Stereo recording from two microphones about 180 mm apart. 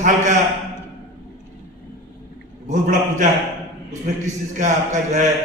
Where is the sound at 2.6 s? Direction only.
45° right (ahead or behind).